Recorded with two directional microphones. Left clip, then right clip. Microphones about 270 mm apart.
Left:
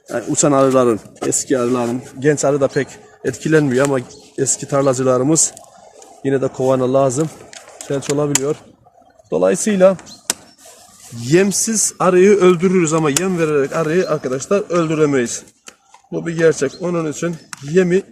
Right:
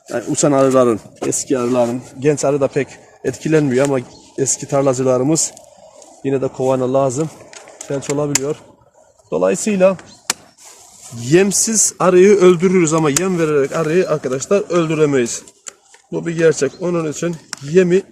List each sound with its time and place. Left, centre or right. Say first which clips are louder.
0.1 s speech: even; centre
11.2 s a man's voice: right 1 dB; centre